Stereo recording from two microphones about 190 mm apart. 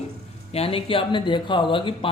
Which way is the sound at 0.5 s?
30° left (ahead or behind).